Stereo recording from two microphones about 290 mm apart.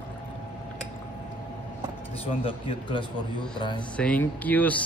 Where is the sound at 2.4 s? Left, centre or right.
Centre.